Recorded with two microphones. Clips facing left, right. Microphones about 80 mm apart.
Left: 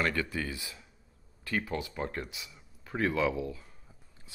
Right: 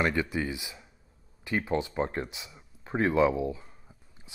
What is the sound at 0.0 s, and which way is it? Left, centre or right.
Speech, centre.